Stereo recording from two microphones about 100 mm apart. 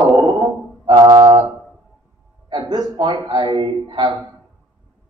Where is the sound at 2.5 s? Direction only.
45° right (ahead or behind).